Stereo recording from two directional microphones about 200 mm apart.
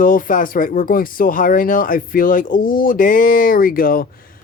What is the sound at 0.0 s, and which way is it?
Speech, 45° left (ahead or behind).